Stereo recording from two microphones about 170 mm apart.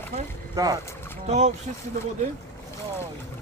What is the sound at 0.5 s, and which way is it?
Speech, 20° right (ahead or behind).